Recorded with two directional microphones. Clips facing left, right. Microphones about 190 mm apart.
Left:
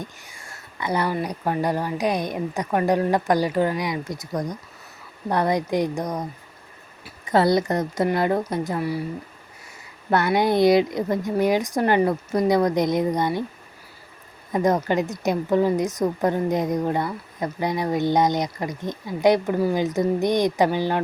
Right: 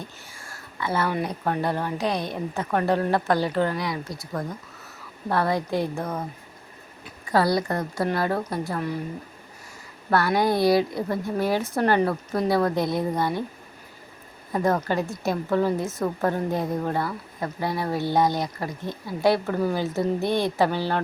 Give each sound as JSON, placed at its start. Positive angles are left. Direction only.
{"t": 0.5, "sound": "a sound", "side_deg": 15}
{"t": 1.1, "sound": "a woman's voice", "side_deg": 10}
{"t": 7.3, "sound": "a woman's voice", "side_deg": 20}
{"t": 10.1, "sound": "a woman's voice", "side_deg": 20}
{"t": 14.5, "sound": "a woman's voice", "side_deg": 20}